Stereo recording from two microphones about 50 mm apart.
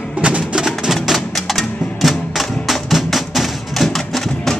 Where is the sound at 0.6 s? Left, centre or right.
Centre.